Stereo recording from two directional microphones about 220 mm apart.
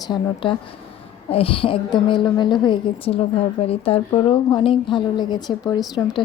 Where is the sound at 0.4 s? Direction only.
20° left (ahead or behind).